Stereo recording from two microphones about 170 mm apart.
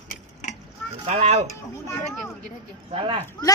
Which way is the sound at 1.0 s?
40° right (ahead or behind).